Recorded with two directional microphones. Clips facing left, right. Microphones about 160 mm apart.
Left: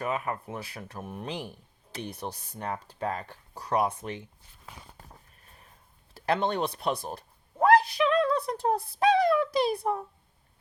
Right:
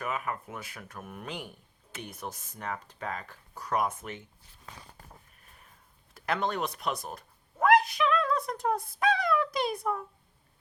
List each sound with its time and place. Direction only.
0.0 s speech: 30° left (ahead or behind)
6.1 s speech: 30° left (ahead or behind)